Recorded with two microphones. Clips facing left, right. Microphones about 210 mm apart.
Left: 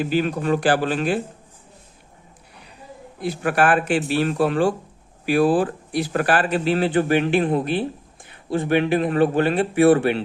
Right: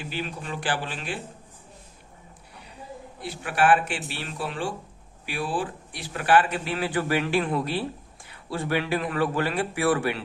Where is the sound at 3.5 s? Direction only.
50° left (ahead or behind).